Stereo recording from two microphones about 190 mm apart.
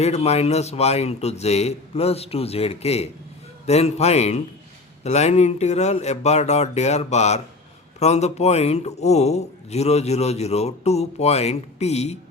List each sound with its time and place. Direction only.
0.0 s a man's voice: 35° left (ahead or behind)